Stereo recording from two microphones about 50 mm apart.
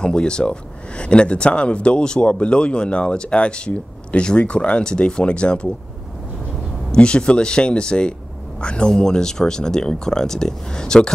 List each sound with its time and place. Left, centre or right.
0.0 s speech: centre
6.9 s speech: centre